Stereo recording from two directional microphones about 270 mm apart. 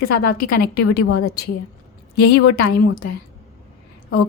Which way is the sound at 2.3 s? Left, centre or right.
Left.